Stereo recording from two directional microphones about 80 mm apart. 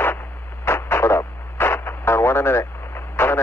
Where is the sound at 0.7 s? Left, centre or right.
Left.